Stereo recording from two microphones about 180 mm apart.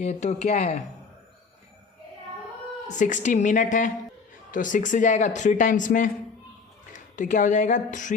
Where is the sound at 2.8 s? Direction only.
45° left (ahead or behind).